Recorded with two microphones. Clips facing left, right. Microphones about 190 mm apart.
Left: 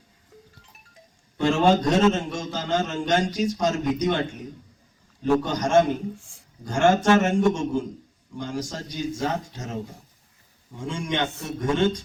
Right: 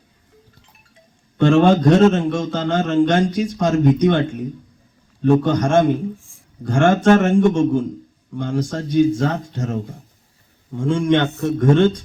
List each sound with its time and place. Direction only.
1.4 s a man's voice: 55° right (ahead or behind)
5.5 s a man's voice: 55° right (ahead or behind)
6.1 s a sound: 80° left
6.7 s a man's voice: 55° right (ahead or behind)